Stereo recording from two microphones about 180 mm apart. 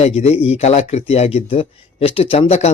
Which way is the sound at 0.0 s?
35° left (ahead or behind).